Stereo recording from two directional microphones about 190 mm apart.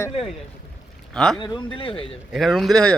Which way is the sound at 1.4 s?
25° left (ahead or behind).